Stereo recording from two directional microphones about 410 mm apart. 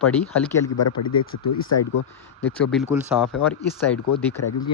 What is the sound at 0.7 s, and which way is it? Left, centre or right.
Speech, left.